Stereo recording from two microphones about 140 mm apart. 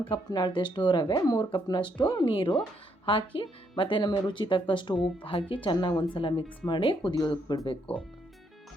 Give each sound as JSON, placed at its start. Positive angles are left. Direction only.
{"t": 0.0, "sound": "speech", "side_deg": 30}